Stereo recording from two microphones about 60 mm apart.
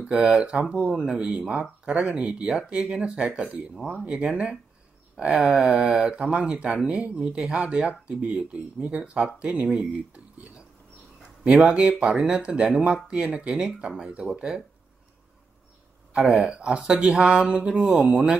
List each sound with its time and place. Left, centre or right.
0.0 s speech: centre
4.0 s speech: centre
10.3 s a sound: right
11.4 s speech: centre
16.1 s speech: centre